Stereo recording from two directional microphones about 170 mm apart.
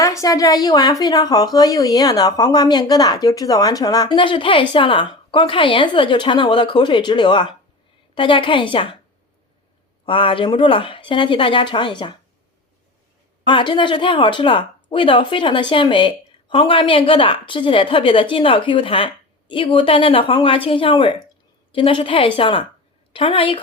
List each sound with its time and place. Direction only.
0.0 s a woman's voice: 20° left (ahead or behind)
10.1 s a woman's voice: 30° left (ahead or behind)
13.4 s speech: 30° left (ahead or behind)